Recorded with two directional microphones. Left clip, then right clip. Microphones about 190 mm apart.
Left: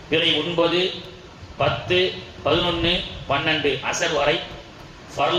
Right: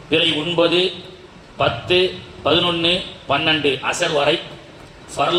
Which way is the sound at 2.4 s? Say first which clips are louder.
Right 4 dB; 30° right (ahead or behind).